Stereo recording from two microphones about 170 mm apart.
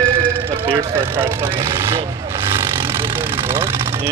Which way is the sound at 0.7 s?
15° right (ahead or behind).